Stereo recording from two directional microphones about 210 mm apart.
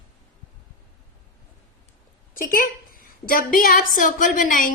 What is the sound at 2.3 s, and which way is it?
A woman's voice, 40° left (ahead or behind).